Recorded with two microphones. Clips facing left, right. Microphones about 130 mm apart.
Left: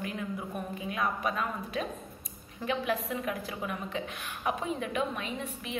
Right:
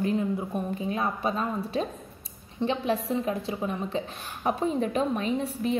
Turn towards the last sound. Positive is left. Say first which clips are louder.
# right 10 dB
turn(degrees=-35)  # may be behind; listen again after turning